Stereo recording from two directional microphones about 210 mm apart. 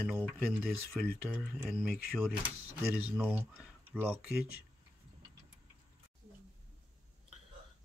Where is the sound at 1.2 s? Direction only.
5° left (ahead or behind).